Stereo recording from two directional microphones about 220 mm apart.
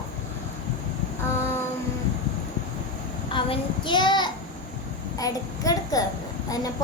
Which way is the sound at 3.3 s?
20° left (ahead or behind).